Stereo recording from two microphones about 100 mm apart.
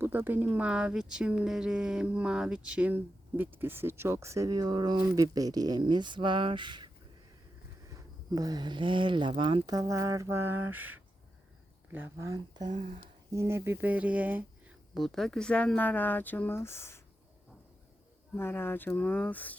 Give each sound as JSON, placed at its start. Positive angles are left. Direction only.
{"t": 0.0, "sound": "speech", "side_deg": -20}
{"t": 7.9, "sound": "speech", "side_deg": -40}
{"t": 9.7, "sound": "speech", "side_deg": -30}
{"t": 14.9, "sound": "speech", "side_deg": 0}
{"t": 18.3, "sound": "speech", "side_deg": 20}